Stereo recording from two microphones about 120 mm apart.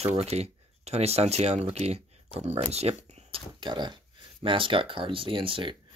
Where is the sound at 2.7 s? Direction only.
60° right (ahead or behind).